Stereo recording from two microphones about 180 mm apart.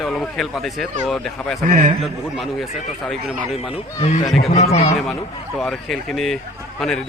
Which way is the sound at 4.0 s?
35° left (ahead or behind).